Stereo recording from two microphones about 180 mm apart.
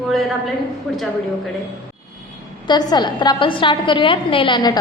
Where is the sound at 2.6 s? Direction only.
25° left (ahead or behind).